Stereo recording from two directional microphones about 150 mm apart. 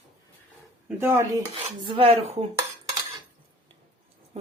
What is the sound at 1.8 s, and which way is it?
Speech, 35° right (ahead or behind).